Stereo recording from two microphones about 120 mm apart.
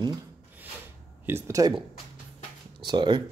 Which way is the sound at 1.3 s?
20° right (ahead or behind).